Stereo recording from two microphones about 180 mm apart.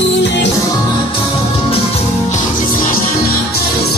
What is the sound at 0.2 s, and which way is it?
Music, 75° left (ahead or behind).